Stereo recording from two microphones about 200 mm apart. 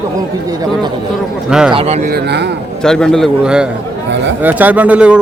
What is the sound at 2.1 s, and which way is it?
Speech, 55° right (ahead or behind).